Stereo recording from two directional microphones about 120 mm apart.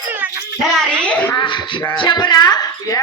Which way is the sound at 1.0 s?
10° left (ahead or behind).